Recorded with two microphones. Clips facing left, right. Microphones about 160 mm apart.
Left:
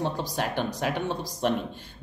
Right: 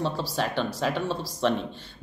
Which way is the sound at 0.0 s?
15° left (ahead or behind).